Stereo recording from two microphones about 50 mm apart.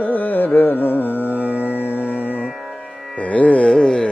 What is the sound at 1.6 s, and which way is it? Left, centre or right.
Music, left.